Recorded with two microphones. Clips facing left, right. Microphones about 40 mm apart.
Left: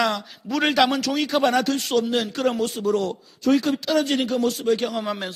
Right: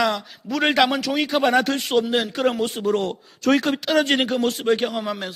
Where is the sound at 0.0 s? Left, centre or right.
Centre.